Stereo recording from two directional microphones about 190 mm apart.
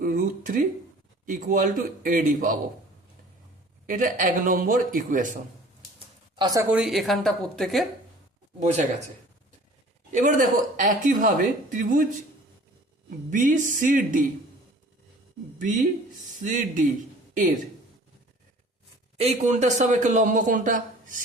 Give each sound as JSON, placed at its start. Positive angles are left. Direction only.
{"t": 0.0, "sound": "a sound", "side_deg": -45}
{"t": 1.2, "sound": "speech", "side_deg": -45}
{"t": 3.8, "sound": "speech", "side_deg": -45}
{"t": 6.3, "sound": "a woman's voice", "side_deg": -20}
{"t": 6.7, "sound": "speech", "side_deg": 0}
{"t": 8.5, "sound": "a man's voice", "side_deg": -35}
{"t": 10.1, "sound": "speech", "side_deg": -40}
{"t": 13.1, "sound": "speech", "side_deg": -40}
{"t": 15.5, "sound": "speech", "side_deg": -45}
{"t": 19.1, "sound": "a man's voice", "side_deg": -35}